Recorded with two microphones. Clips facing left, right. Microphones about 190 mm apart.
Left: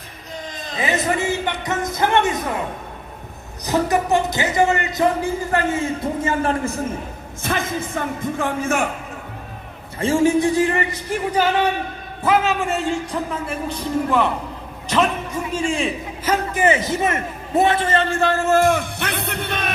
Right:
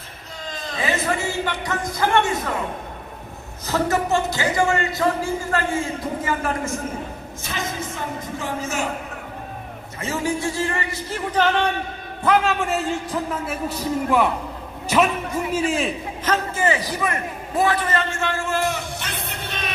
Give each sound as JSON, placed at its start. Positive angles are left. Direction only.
{"t": 0.5, "sound": "a sound", "side_deg": 20}
{"t": 3.7, "sound": "speech", "side_deg": 15}
{"t": 6.2, "sound": "speech", "side_deg": 30}
{"t": 7.4, "sound": "speech", "side_deg": 55}
{"t": 10.0, "sound": "speech", "side_deg": 30}
{"t": 11.3, "sound": "a man's voice", "side_deg": 10}
{"t": 16.2, "sound": "a sound", "side_deg": 10}
{"t": 16.6, "sound": "a man's voice", "side_deg": 20}